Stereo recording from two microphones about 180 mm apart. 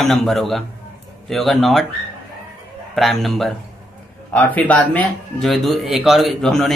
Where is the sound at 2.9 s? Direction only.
Centre (ahead or behind).